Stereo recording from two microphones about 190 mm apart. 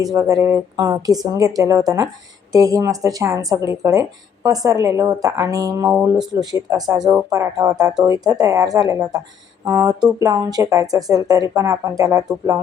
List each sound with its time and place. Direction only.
0.0 s a woman's voice: 20° right (ahead or behind)
6.4 s a woman's voice: 20° right (ahead or behind)